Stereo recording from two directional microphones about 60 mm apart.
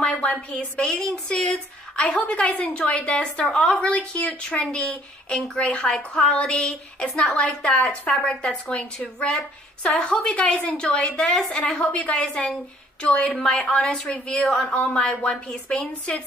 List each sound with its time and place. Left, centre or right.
0.1 s a woman's voice: centre
3.4 s speech: centre
7.1 s a woman's voice: centre